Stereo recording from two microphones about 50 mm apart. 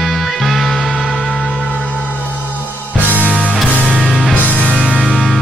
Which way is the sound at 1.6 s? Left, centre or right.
Left.